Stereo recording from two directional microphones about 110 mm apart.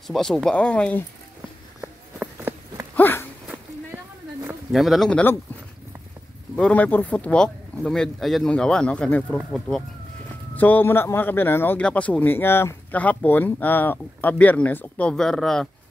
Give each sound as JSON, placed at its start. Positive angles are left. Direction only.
{"t": 0.0, "sound": "a man's voice", "side_deg": 5}
{"t": 3.0, "sound": "a sound", "side_deg": 20}
{"t": 4.7, "sound": "speech", "side_deg": 0}
{"t": 6.5, "sound": "a man's voice", "side_deg": 10}
{"t": 10.5, "sound": "a man's voice", "side_deg": 15}